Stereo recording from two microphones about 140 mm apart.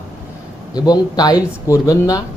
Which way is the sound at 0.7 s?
30° left (ahead or behind).